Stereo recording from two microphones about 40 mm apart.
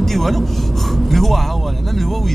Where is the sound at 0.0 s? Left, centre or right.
Centre.